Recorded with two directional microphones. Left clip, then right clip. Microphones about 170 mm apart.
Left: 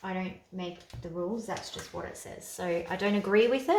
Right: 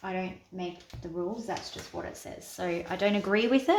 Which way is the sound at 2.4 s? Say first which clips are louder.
Left 1 dB; 40° right (ahead or behind).